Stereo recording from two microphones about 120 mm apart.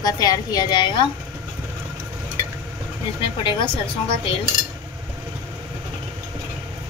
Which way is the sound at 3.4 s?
45° left (ahead or behind).